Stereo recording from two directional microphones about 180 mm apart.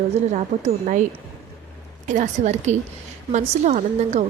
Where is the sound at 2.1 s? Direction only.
40° right (ahead or behind).